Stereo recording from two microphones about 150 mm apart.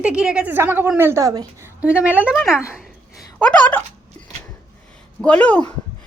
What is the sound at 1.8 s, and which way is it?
Speech, 10° right (ahead or behind).